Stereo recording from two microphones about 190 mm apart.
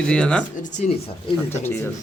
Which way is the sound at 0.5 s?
40° left (ahead or behind).